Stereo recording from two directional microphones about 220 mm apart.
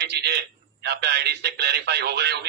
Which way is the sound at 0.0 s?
50° right (ahead or behind).